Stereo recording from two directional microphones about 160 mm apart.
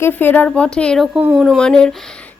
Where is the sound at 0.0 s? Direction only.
10° left (ahead or behind).